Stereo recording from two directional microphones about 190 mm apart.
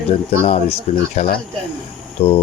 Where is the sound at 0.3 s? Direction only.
35° left (ahead or behind).